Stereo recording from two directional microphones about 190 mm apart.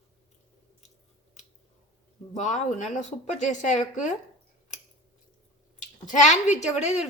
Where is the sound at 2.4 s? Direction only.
40° left (ahead or behind).